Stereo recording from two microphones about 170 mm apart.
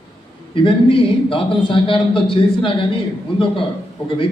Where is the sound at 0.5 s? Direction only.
30° left (ahead or behind).